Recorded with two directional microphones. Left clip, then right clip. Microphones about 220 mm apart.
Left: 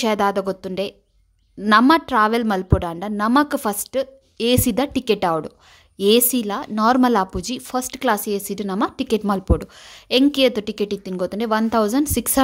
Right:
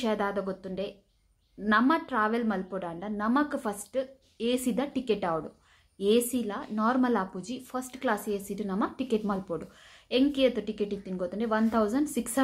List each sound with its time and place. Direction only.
0.0 s a woman's voice: 50° left (ahead or behind)